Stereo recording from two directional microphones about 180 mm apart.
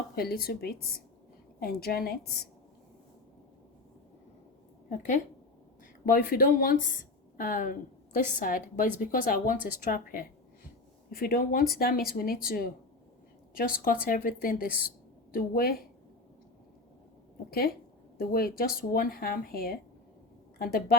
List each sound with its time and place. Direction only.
0.2 s speech: 55° left (ahead or behind)
4.9 s a woman's voice: 45° left (ahead or behind)
17.5 s speech: 60° left (ahead or behind)